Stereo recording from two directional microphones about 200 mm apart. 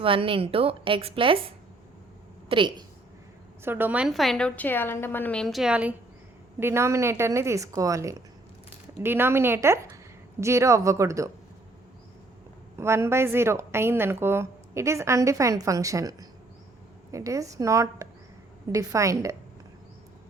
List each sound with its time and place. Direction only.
0.0 s a woman's voice: 25° right (ahead or behind)
2.5 s a woman's voice: 25° right (ahead or behind)
3.6 s a woman's voice: 10° right (ahead or behind)
12.7 s a woman's voice: 15° right (ahead or behind)